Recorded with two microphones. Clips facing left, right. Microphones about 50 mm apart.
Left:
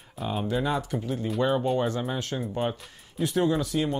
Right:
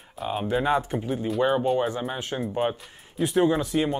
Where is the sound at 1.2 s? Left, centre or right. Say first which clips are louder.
Right 2 dB; centre.